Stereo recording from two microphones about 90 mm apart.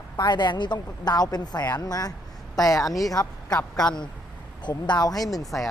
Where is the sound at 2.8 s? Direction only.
Centre (ahead or behind).